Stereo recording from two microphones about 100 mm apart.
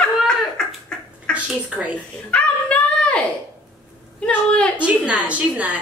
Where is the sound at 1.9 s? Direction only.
15° left (ahead or behind).